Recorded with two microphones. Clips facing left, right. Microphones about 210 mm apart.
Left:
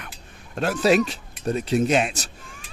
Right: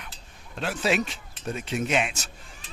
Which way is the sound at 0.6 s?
40° left (ahead or behind).